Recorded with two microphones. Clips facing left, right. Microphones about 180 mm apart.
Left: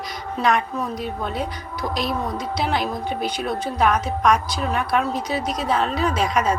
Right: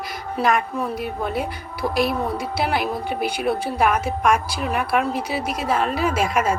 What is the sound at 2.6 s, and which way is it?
A woman's voice, 5° right (ahead or behind).